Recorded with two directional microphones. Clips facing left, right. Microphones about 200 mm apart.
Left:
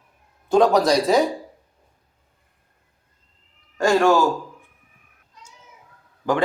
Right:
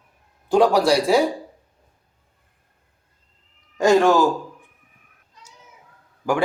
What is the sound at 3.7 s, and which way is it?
Speech, 20° right (ahead or behind).